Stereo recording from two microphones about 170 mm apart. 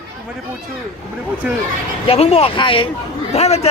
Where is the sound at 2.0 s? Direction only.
35° left (ahead or behind).